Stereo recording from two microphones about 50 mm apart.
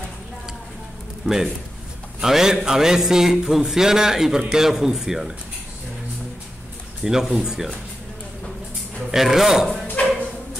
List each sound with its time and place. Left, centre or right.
1.2 s a man's voice: centre
7.0 s a man's voice: centre
9.1 s a man's voice: centre
10.0 s bow-wow: left